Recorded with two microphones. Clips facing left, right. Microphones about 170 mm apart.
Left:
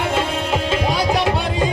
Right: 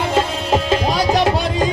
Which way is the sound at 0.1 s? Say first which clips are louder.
Right 3 dB; 40° right (ahead or behind).